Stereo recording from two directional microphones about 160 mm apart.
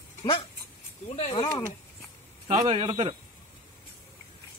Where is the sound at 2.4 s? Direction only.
35° right (ahead or behind).